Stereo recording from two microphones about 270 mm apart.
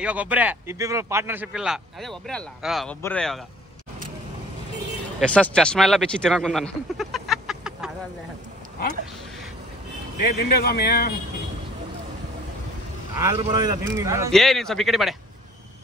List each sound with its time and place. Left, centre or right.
0.0 s speech: centre
5.2 s speech: centre
10.1 s a man's voice: left
13.2 s a man's voice: centre
14.3 s speech: centre